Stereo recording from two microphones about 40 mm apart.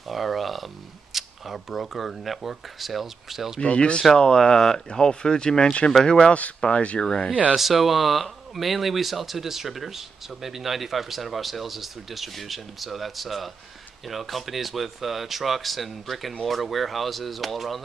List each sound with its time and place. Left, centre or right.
0.1 s a sound: centre
1.1 s speech: centre
3.6 s speech: left
4.1 s speech: centre; by 7.1 s left
7.5 s speech: centre